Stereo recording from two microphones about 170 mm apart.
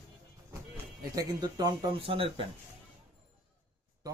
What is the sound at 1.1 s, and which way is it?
Speech, 25° right (ahead or behind).